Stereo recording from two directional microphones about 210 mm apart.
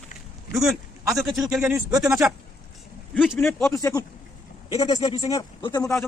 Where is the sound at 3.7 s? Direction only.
15° left (ahead or behind).